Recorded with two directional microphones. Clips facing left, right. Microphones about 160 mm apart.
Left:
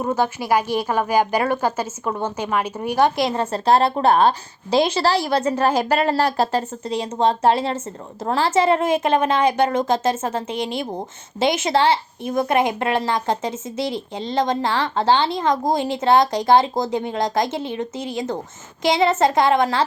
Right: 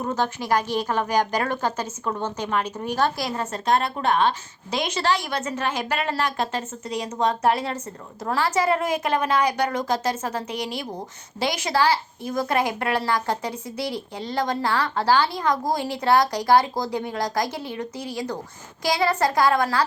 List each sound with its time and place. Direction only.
0.0 s a woman's voice: 10° left (ahead or behind)
3.2 s a woman's voice: 25° left (ahead or behind)